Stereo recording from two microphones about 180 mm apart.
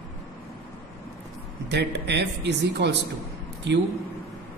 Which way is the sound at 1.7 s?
70° right (ahead or behind).